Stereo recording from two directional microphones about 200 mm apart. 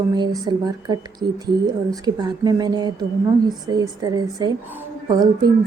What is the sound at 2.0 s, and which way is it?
A woman's voice, 20° right (ahead or behind).